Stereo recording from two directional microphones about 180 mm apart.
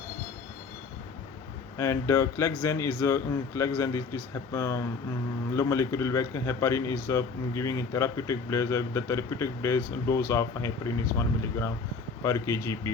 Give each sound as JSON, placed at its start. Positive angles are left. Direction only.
{"t": 1.8, "sound": "a man's voice", "side_deg": 15}
{"t": 12.2, "sound": "a man's voice", "side_deg": 15}